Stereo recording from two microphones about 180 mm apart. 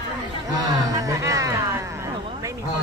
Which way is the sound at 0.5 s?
20° right (ahead or behind).